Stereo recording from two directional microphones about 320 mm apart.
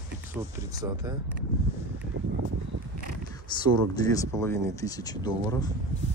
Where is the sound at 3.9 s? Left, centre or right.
Centre.